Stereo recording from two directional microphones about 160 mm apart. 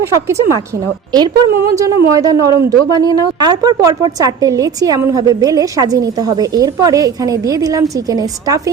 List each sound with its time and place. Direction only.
0.3 s a woman's voice: 20° right (ahead or behind)